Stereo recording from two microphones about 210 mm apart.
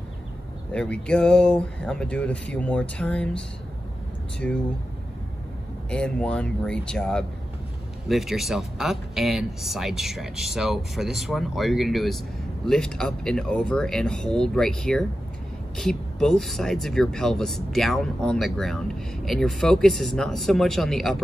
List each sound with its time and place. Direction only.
0.7 s speech: 5° left (ahead or behind)
5.9 s speech: 5° left (ahead or behind)